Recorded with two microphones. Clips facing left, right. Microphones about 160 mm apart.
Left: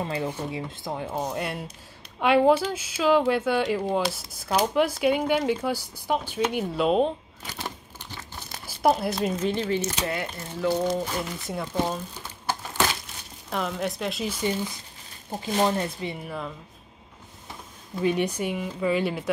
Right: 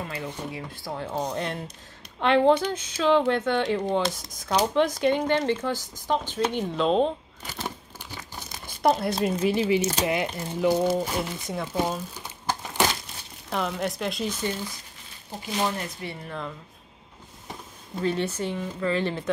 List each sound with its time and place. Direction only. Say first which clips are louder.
0.0 s speech: left 4 dB; 25° left (ahead or behind)
1.1 s speech: right 2 dB; 5° left (ahead or behind)
8.6 s crumpling: even; 5° left (ahead or behind)
9.2 s speech: right 2 dB; 10° right (ahead or behind)
11.7 s crumpling: even; 10° right (ahead or behind)
13.5 s speech: even; centre (ahead or behind); by 16.2 s 20° left (ahead or behind)
16.3 s speech: left 1 dB; 5° left (ahead or behind)
18.0 s speech: left 2 dB; 15° left (ahead or behind)